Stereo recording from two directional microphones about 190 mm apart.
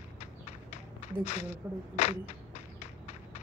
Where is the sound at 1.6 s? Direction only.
10° right (ahead or behind).